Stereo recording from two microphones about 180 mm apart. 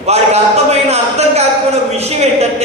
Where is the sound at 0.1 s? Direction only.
35° right (ahead or behind).